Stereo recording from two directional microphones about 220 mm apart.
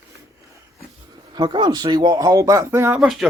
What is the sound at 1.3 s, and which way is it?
Speech, 20° right (ahead or behind).